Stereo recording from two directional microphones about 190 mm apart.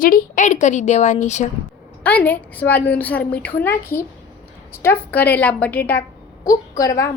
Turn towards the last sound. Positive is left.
turn(degrees=15)  # may be behind; listen again after turning